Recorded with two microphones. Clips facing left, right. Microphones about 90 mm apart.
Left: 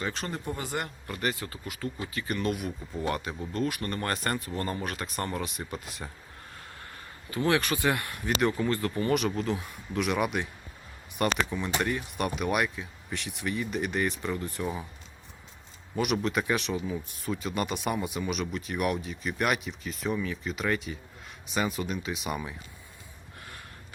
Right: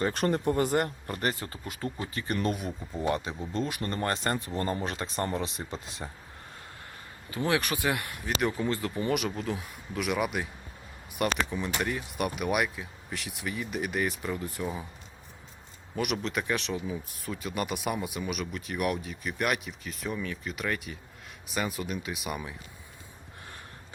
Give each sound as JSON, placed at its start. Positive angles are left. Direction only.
{"t": 0.0, "sound": "a man's voice", "side_deg": -55}
{"t": 1.0, "sound": "speech", "side_deg": -40}
{"t": 3.1, "sound": "speech", "side_deg": -20}
{"t": 7.3, "sound": "speech", "side_deg": -15}
{"t": 16.0, "sound": "speech", "side_deg": 0}